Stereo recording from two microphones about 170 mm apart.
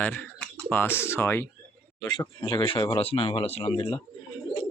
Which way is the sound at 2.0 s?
25° left (ahead or behind).